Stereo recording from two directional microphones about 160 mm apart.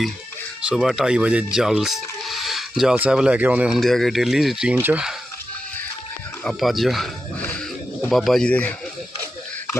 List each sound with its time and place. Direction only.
0.6 s speech: 5° right (ahead or behind)
6.4 s speech: centre (ahead or behind)
8.1 s speech: centre (ahead or behind)